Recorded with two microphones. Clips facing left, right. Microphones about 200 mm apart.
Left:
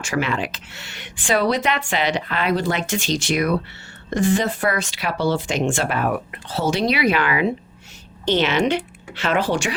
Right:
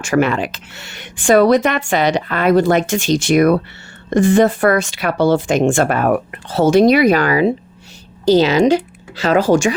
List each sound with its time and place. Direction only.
0.0 s speech: 50° right (ahead or behind)